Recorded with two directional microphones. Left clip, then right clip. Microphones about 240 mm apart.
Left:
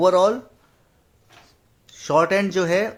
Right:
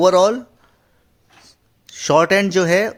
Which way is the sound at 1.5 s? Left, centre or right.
Right.